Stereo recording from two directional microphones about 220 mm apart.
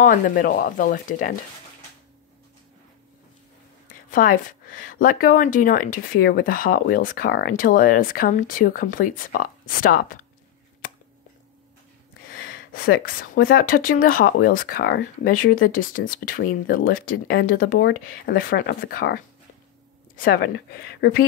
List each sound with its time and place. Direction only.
0.0 s a woman's voice: 40° left (ahead or behind)
4.1 s a woman's voice: 40° left (ahead or behind)
12.3 s a woman's voice: 40° left (ahead or behind)